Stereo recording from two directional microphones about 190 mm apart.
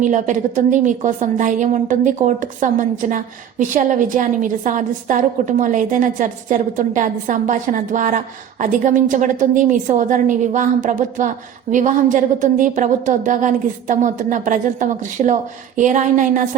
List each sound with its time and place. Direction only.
0.0 s a woman's voice: 40° right (ahead or behind)